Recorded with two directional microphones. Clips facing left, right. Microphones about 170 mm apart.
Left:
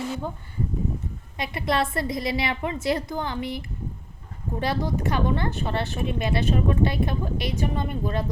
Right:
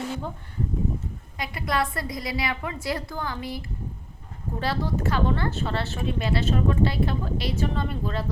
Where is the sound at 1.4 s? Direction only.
25° left (ahead or behind).